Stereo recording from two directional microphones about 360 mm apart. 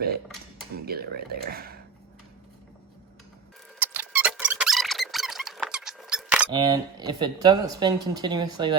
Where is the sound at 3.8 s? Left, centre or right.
Centre.